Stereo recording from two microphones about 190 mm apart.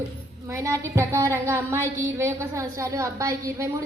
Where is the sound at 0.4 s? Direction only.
15° right (ahead or behind).